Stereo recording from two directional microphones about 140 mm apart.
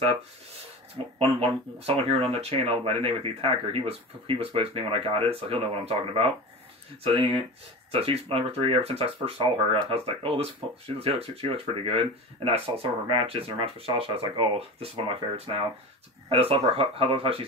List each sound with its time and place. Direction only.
0.9 s speech: 40° right (ahead or behind)